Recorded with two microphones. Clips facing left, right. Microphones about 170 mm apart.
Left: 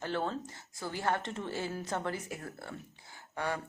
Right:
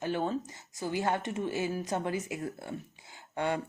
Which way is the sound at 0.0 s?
15° right (ahead or behind).